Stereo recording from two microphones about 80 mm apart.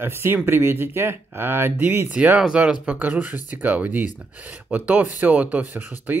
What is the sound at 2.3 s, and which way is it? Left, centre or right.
Speech, centre.